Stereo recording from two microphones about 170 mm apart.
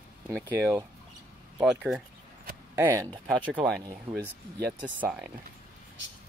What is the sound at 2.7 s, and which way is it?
Speech, 15° right (ahead or behind).